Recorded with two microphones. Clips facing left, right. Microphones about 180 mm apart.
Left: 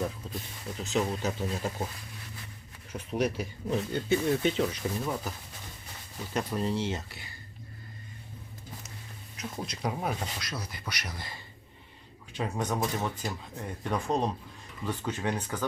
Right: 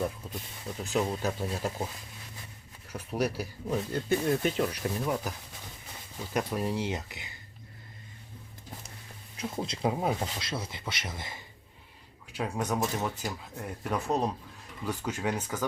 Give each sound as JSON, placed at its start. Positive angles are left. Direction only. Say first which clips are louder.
{"t": 0.8, "sound": "speech", "louder": "even", "side_deg": -15}
{"t": 2.9, "sound": "speech", "louder": "left 1 dB", "side_deg": -10}
{"t": 9.4, "sound": "speech", "louder": "right 4 dB", "side_deg": -25}
{"t": 12.3, "sound": "speech", "louder": "even", "side_deg": -5}